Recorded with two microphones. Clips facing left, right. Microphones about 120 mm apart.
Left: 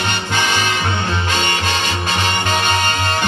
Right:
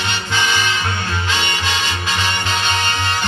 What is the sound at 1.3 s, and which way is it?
Music, 50° left (ahead or behind).